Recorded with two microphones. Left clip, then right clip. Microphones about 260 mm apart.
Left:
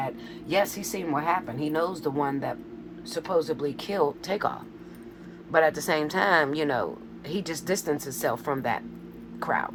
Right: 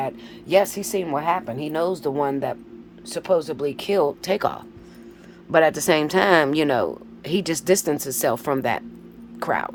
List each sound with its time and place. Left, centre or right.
0.0 s a woman's voice: right